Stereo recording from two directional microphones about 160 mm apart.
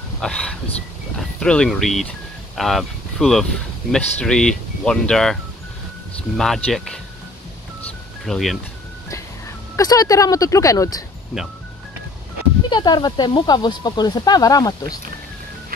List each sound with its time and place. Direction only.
0.2 s speech: 5° left (ahead or behind)
8.3 s speech: centre (ahead or behind)
9.8 s speech: 25° left (ahead or behind)
12.6 s speech: 30° left (ahead or behind)